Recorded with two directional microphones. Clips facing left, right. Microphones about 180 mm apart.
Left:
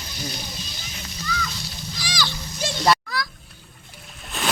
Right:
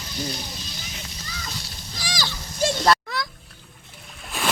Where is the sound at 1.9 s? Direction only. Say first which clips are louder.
Left 1 dB; 45° right (ahead or behind).